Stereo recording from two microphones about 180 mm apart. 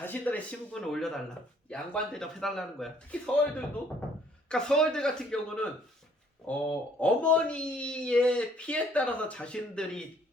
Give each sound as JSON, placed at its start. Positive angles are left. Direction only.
{"t": 0.0, "sound": "speech", "side_deg": 10}
{"t": 4.4, "sound": "speech", "side_deg": 5}